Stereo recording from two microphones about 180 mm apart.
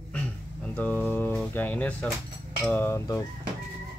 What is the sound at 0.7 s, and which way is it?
Speech, 10° left (ahead or behind).